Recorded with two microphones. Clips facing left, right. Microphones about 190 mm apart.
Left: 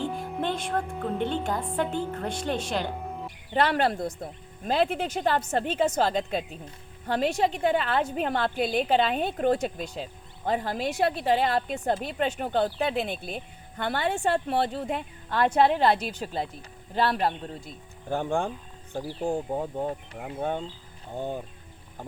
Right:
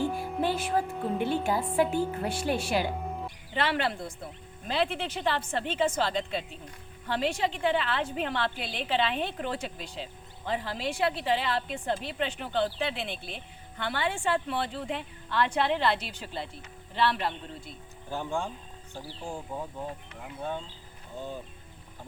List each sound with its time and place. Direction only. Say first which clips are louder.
0.0 s a woman's voice: right 1 dB; 10° right (ahead or behind)
3.5 s a woman's voice: left 5 dB; 45° left (ahead or behind)